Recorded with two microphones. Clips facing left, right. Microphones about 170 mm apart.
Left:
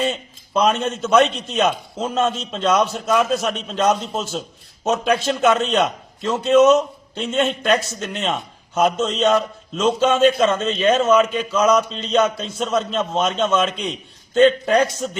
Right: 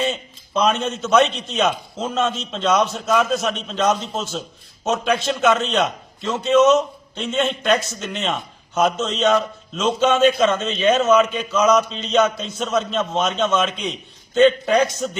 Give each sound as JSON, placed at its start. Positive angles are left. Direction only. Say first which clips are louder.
{"t": 0.0, "sound": "a man's voice", "louder": "left 1 dB", "side_deg": 0}
{"t": 4.2, "sound": "a man's voice", "louder": "left 1 dB", "side_deg": 35}
{"t": 4.9, "sound": "a man's voice", "louder": "left 1 dB", "side_deg": 0}